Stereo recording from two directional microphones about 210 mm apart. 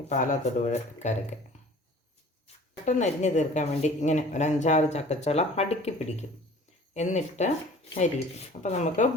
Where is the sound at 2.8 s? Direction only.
35° left (ahead or behind).